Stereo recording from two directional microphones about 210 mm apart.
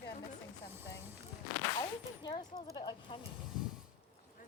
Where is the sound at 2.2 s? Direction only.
20° left (ahead or behind).